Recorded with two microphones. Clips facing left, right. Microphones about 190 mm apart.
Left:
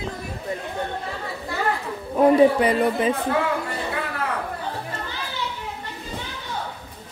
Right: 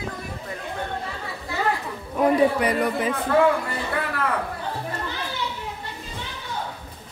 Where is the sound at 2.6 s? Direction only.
25° left (ahead or behind).